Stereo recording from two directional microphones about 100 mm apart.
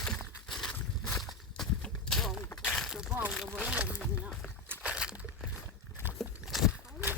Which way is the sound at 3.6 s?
10° right (ahead or behind).